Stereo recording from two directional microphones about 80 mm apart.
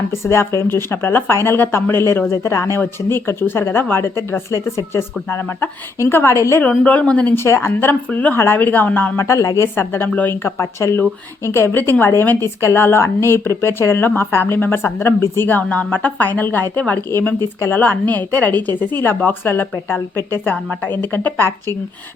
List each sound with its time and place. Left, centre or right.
0.1 s a woman's voice: left
6.6 s speech: centre
7.3 s a woman's voice: left
9.1 s speech: left
9.7 s a woman's voice: left
10.4 s a woman's voice: left; by 17.0 s centre
17.1 s a woman's voice: left